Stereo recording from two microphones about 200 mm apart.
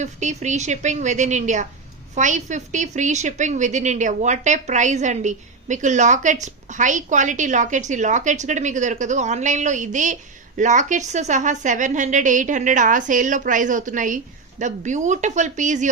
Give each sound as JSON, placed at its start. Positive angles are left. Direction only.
{"t": 0.0, "sound": "a woman's voice", "side_deg": -35}